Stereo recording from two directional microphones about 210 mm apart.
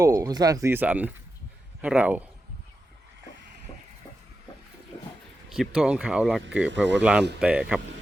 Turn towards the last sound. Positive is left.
turn(degrees=-5)  # may be behind; listen again after turning